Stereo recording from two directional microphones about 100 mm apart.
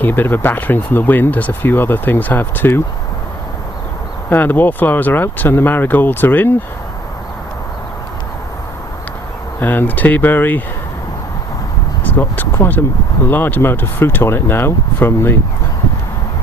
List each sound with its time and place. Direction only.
0.0 s speech: 20° left (ahead or behind)
4.3 s speech: 20° left (ahead or behind)
9.6 s speech: 20° left (ahead or behind)
12.1 s speech: 20° left (ahead or behind)